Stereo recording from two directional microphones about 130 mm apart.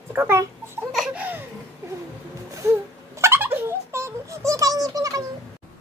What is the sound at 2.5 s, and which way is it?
Giggle, 25° right (ahead or behind).